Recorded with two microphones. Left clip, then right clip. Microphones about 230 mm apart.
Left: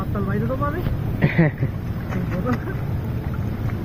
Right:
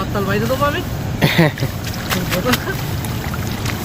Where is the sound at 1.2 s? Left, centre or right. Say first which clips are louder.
Right 7 dB; centre.